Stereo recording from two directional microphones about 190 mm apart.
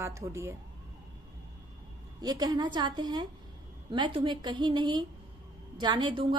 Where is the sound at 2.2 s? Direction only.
20° right (ahead or behind).